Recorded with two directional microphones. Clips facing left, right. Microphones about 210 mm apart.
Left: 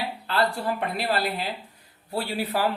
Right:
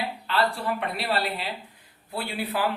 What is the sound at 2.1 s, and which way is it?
Speech, 40° left (ahead or behind).